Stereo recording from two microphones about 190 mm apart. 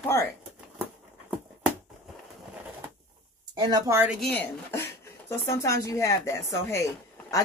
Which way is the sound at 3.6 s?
20° right (ahead or behind).